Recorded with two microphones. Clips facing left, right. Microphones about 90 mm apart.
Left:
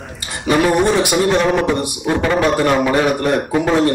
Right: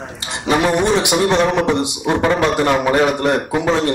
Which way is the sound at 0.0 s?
20° right (ahead or behind).